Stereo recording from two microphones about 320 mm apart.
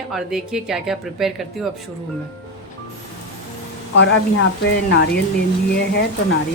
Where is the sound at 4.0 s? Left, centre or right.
Left.